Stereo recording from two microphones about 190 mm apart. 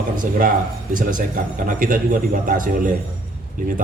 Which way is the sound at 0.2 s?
45° right (ahead or behind).